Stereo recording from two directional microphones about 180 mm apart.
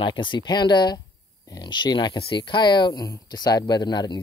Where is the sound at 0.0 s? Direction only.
25° left (ahead or behind).